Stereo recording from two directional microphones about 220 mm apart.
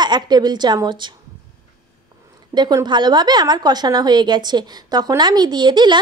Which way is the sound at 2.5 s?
20° right (ahead or behind).